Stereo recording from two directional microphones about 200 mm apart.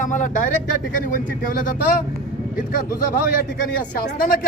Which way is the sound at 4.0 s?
45° left (ahead or behind).